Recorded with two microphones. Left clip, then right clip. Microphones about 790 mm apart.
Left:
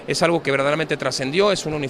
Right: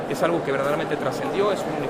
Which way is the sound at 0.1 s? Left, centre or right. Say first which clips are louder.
Left 4 dB; left.